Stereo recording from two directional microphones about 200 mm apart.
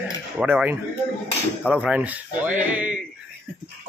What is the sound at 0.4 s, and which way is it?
Speech, 5° right (ahead or behind).